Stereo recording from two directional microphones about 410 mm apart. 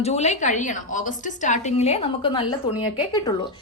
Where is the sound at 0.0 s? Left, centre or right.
Centre.